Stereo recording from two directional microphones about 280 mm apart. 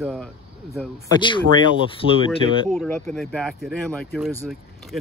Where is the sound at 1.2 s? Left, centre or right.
Centre.